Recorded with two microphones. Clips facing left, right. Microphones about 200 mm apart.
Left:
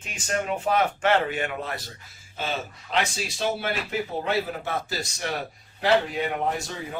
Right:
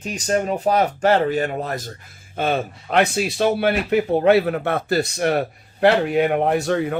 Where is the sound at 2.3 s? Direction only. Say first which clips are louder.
Right 9 dB; 55° right (ahead or behind).